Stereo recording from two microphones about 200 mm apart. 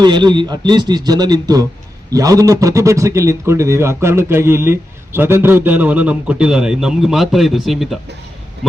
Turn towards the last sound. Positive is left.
turn(degrees=0)  # may be behind; listen again after turning